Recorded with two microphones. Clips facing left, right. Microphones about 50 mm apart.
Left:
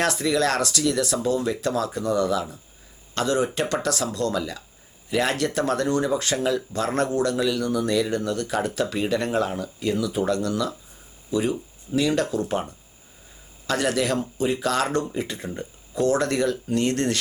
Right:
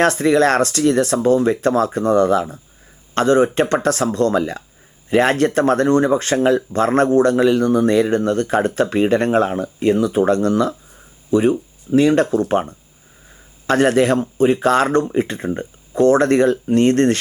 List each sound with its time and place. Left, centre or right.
0.0 s speech: right